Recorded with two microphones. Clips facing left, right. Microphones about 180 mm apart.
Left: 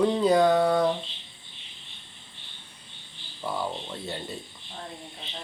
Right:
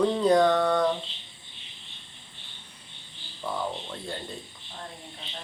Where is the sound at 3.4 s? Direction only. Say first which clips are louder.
Left 1 dB; 5° left (ahead or behind).